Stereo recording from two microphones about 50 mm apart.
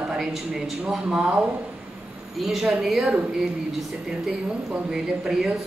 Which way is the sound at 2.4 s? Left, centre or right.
Centre.